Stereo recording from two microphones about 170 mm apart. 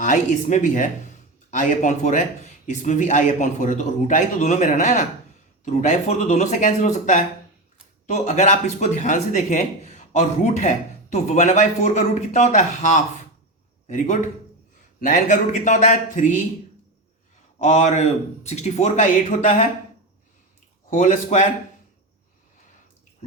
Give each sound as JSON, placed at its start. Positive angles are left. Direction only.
{"t": 0.0, "sound": "speech", "side_deg": 45}
{"t": 17.6, "sound": "speech", "side_deg": 45}
{"t": 20.9, "sound": "speech", "side_deg": 45}